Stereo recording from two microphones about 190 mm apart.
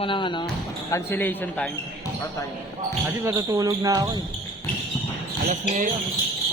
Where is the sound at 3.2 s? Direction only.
15° right (ahead or behind).